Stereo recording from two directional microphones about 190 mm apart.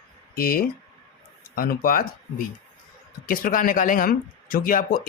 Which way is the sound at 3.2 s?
50° left (ahead or behind).